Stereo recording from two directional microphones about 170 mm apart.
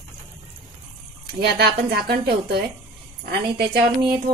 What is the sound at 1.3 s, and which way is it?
Speech, 70° right (ahead or behind).